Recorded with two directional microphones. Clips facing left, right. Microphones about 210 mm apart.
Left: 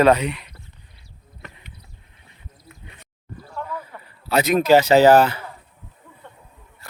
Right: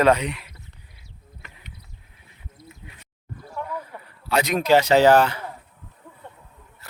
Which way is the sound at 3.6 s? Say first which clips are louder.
Even; 15° right (ahead or behind).